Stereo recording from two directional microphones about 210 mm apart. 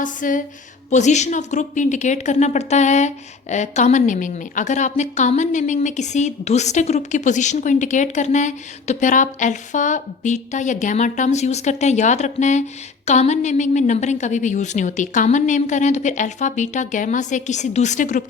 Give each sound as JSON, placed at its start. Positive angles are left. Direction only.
{"t": 0.0, "sound": "a woman's voice", "side_deg": 40}